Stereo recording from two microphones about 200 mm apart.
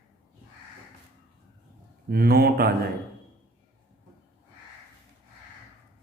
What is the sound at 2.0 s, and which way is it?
Speech, 50° right (ahead or behind).